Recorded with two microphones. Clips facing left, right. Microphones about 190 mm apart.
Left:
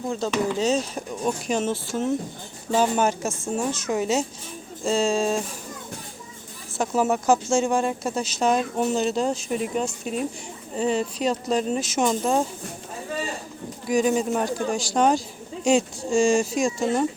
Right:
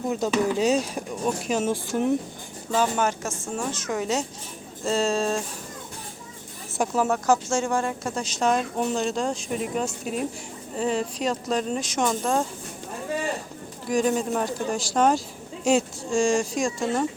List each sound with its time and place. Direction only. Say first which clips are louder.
0.1 s speech: right 1 dB; 15° right (ahead or behind)
2.7 s a woman's voice: left 2 dB; 15° left (ahead or behind)
3.9 s speech: left 3 dB; 20° left (ahead or behind)
4.9 s speech: left 2 dB; centre (ahead or behind)
7.0 s speech: left 2 dB; 25° left (ahead or behind)
8.1 s speech: even; 5° left (ahead or behind)
13.9 s speech: left 2 dB; 5° left (ahead or behind)